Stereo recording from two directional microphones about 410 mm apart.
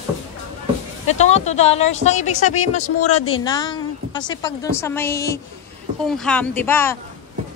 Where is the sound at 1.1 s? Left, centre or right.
Centre.